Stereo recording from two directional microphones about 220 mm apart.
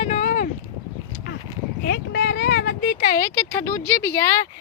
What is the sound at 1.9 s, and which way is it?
Speech, 45° left (ahead or behind).